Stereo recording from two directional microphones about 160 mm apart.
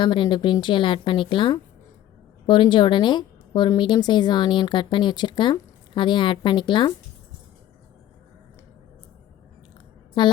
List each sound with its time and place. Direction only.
0.0 s a woman's voice: 30° left (ahead or behind)
10.2 s speech: 30° left (ahead or behind)